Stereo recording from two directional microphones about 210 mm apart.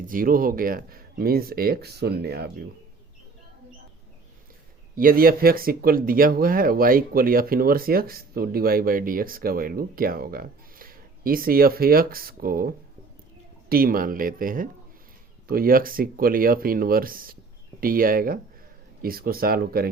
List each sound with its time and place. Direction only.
0.1 s speech: 40° right (ahead or behind)
4.9 s speech: 45° right (ahead or behind)